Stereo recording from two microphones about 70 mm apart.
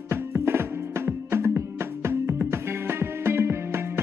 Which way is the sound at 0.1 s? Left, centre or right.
Right.